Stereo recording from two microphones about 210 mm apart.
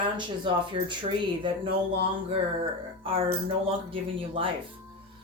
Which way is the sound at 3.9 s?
25° right (ahead or behind).